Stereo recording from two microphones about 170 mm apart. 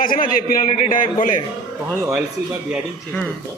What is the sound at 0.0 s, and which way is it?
A man's voice, 55° left (ahead or behind).